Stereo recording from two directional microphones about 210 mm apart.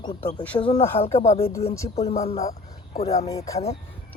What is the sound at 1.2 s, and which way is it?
Speech, 30° left (ahead or behind).